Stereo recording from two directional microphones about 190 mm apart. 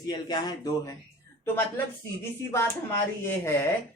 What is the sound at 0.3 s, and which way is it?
Speech, 20° left (ahead or behind).